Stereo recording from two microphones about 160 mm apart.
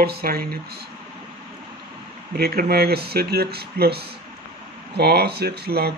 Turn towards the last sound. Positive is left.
turn(degrees=-80)